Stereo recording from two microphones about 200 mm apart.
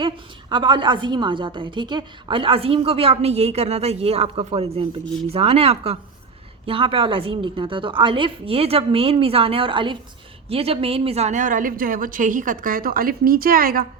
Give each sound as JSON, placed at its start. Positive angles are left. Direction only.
{"t": 0.5, "sound": "a woman's voice", "side_deg": -25}